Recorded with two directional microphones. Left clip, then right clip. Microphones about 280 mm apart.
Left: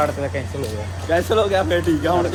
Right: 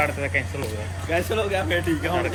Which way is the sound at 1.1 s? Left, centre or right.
Centre.